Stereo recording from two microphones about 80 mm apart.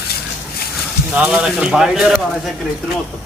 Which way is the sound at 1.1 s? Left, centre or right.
Centre.